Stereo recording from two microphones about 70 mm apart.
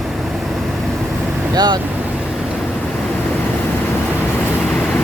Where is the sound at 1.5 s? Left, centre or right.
Right.